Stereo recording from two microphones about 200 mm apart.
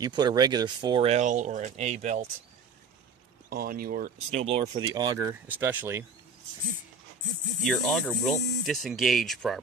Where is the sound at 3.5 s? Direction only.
45° right (ahead or behind).